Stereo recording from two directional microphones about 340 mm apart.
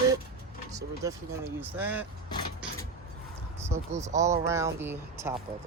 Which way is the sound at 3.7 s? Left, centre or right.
Centre.